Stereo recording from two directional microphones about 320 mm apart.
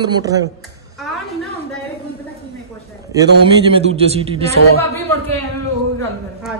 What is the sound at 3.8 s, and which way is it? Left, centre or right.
Speech, centre.